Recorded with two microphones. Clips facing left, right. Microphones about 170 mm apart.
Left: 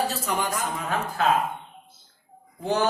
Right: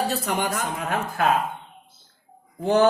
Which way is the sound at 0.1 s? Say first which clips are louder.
Right 2 dB; 65° right (ahead or behind).